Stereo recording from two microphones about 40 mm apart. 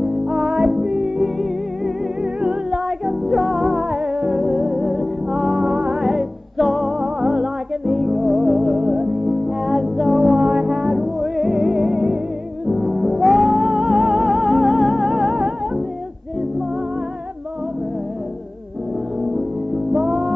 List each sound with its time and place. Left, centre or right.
0.0 s music: centre
0.7 s music: centre
2.7 s music: centre
19.9 s music: centre